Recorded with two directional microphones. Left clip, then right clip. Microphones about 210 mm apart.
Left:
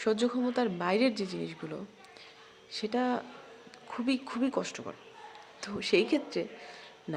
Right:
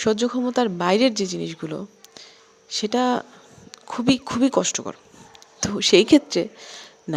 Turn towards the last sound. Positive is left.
turn(degrees=-45)  # may be behind; listen again after turning